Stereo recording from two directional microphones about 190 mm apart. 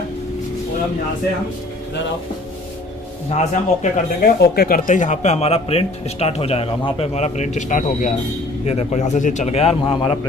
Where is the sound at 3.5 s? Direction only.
45° left (ahead or behind).